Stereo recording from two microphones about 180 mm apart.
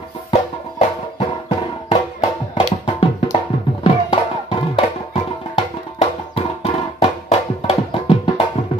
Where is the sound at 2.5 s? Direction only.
30° left (ahead or behind).